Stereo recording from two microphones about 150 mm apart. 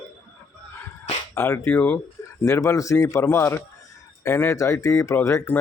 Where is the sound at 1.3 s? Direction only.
20° left (ahead or behind).